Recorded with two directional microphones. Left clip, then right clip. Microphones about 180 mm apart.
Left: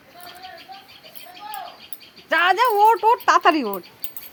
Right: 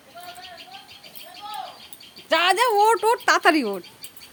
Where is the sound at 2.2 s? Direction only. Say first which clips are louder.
Left 2 dB; 10° right (ahead or behind).